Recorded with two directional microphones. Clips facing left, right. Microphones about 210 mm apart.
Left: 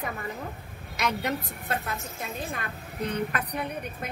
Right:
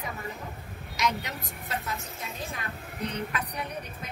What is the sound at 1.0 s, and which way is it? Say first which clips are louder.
Speech: left 2 dB; 55° left (ahead or behind).